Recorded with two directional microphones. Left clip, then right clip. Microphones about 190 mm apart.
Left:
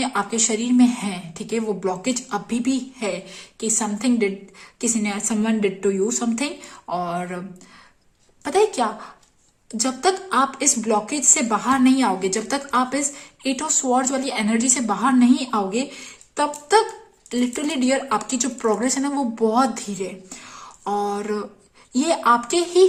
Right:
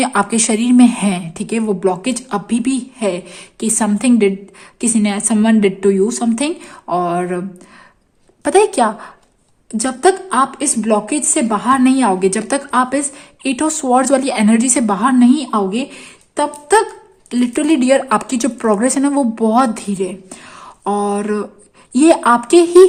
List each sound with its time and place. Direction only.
0.0 s a woman's voice: 45° right (ahead or behind)
8.4 s a woman's voice: 45° right (ahead or behind)